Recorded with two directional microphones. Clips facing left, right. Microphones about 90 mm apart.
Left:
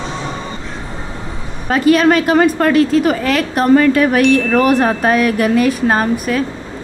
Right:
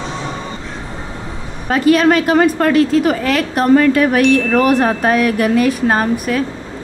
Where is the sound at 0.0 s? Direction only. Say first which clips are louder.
Even; 25° left (ahead or behind).